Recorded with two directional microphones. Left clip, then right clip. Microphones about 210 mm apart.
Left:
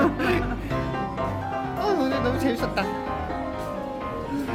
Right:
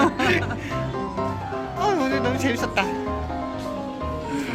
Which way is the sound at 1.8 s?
5° right (ahead or behind).